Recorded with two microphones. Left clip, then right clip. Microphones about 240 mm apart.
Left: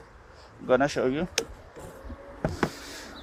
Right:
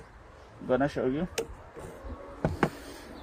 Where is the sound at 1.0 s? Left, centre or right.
Left.